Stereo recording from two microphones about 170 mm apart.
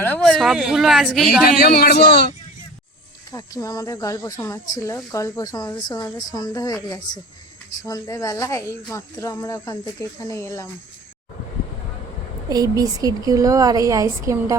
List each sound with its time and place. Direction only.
0.0 s a woman's voice: 5° left (ahead or behind)
1.6 s a man's voice: 65° left (ahead or behind)
3.3 s speech: 20° left (ahead or behind)
12.5 s speech: 20° right (ahead or behind)